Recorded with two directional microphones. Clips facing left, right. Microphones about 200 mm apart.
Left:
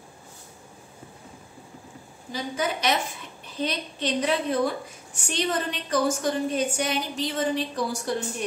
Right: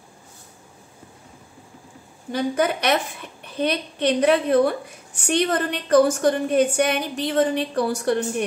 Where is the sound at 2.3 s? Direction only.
60° right (ahead or behind).